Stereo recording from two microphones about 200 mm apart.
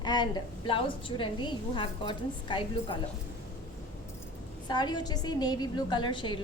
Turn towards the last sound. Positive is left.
turn(degrees=25)  # may be behind; listen again after turning